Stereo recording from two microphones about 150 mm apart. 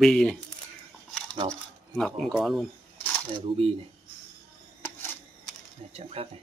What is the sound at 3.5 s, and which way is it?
Speech, 40° right (ahead or behind).